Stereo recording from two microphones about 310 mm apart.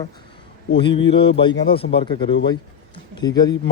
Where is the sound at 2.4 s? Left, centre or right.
Centre.